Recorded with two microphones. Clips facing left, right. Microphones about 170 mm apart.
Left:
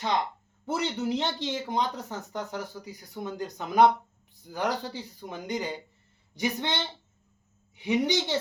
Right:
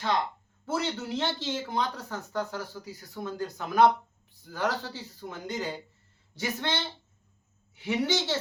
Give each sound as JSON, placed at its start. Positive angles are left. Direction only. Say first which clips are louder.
{"t": 0.6, "sound": "speech", "louder": "left 2 dB", "side_deg": 20}
{"t": 7.8, "sound": "speech", "louder": "left 2 dB", "side_deg": 15}